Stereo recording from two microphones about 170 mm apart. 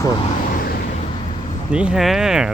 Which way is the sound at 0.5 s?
55° left (ahead or behind).